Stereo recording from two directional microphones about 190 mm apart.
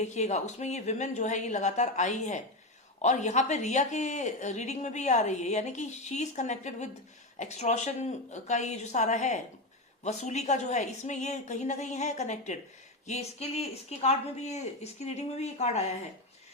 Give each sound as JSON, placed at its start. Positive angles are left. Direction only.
{"t": 0.0, "sound": "a woman's voice", "side_deg": 40}